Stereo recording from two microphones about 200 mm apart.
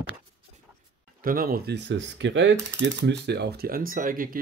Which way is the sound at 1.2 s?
45° right (ahead or behind).